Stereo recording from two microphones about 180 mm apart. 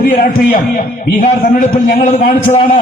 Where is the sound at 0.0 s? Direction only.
50° left (ahead or behind).